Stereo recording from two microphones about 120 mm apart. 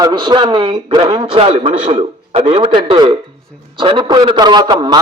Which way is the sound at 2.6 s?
45° right (ahead or behind).